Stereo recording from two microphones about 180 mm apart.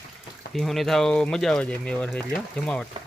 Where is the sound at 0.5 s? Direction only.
Centre (ahead or behind).